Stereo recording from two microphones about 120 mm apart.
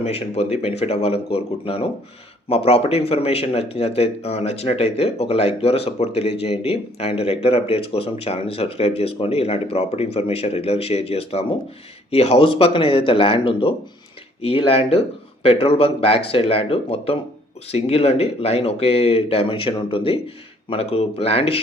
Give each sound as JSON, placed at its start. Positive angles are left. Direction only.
{"t": 0.0, "sound": "speech", "side_deg": 65}